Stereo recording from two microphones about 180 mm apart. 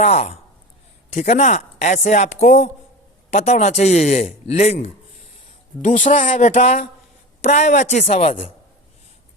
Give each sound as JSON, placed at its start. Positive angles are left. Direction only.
{"t": 0.0, "sound": "speech", "side_deg": 35}
{"t": 5.8, "sound": "speech", "side_deg": 45}